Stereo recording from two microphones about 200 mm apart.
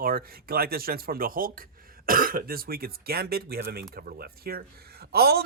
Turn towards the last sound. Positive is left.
turn(degrees=-50)  # may be behind; listen again after turning